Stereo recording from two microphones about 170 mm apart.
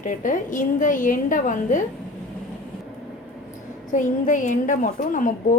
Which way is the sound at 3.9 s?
50° left (ahead or behind).